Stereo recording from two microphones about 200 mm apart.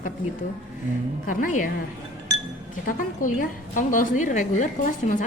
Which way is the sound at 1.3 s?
40° left (ahead or behind).